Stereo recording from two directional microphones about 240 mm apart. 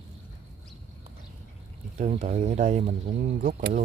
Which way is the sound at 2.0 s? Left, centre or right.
Right.